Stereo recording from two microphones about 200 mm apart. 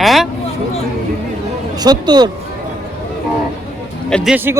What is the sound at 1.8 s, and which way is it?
Speech, 20° right (ahead or behind).